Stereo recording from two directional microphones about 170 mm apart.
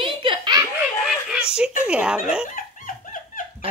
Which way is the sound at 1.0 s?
5° right (ahead or behind).